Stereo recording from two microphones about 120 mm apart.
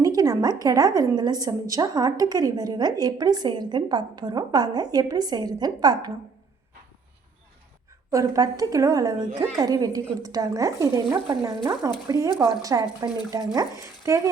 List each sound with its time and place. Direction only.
0.0 s a woman's voice: 30° right (ahead or behind)
8.1 s a woman's voice: 25° right (ahead or behind)